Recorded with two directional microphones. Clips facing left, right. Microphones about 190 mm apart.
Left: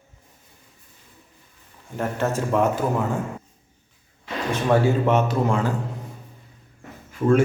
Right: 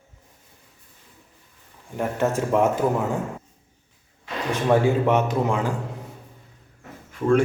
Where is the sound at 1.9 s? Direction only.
15° right (ahead or behind).